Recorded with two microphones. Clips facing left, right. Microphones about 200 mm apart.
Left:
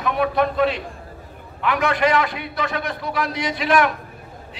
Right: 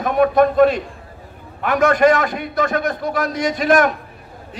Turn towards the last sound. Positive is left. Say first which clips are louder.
# right 4 dB
turn(degrees=-45)  # may be behind; listen again after turning